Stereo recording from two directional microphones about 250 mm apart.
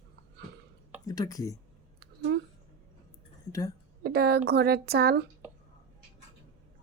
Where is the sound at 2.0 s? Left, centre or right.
Right.